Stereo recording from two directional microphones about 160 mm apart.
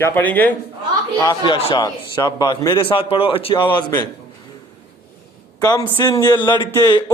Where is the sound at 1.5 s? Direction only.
35° left (ahead or behind).